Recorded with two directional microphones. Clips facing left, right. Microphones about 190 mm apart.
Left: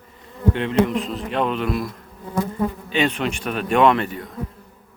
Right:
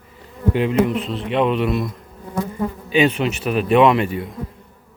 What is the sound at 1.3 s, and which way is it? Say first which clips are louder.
Speech: right 4 dB; 5° right (ahead or behind).